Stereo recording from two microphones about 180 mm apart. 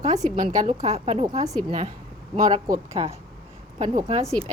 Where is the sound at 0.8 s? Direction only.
35° right (ahead or behind).